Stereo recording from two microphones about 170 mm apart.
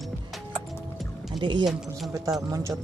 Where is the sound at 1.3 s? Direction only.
25° right (ahead or behind).